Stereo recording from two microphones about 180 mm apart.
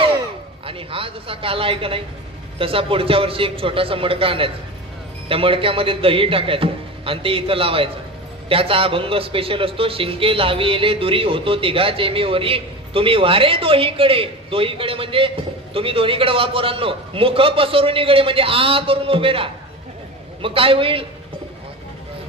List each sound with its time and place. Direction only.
0.6 s a woman's voice: 30° right (ahead or behind)